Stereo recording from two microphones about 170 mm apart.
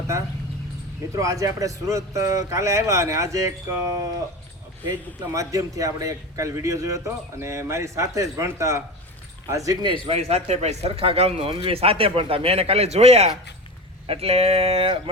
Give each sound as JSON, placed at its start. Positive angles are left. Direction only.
{"t": 1.1, "sound": "a man's voice", "side_deg": -20}
{"t": 10.1, "sound": "speech", "side_deg": -40}